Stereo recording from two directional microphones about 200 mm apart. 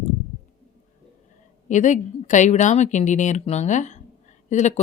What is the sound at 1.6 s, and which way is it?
Speech, 35° left (ahead or behind).